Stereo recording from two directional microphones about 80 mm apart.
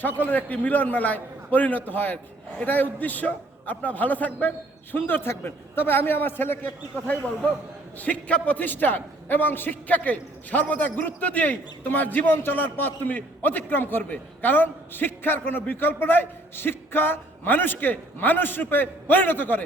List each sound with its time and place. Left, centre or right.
0.3 s a man's voice: centre
8.0 s a man's voice: centre